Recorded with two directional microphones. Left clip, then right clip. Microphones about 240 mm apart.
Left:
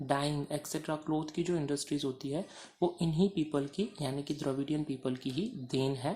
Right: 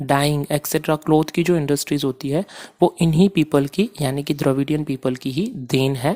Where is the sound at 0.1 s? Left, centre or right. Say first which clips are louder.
Right 14 dB; right.